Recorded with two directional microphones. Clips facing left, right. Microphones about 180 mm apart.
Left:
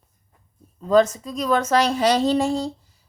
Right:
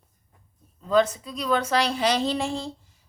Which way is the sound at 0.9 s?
45° left (ahead or behind).